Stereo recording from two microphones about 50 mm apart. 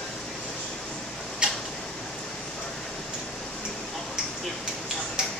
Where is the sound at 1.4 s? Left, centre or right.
Centre.